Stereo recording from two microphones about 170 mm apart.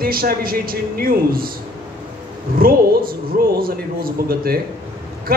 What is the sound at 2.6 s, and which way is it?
Speech, 60° right (ahead or behind).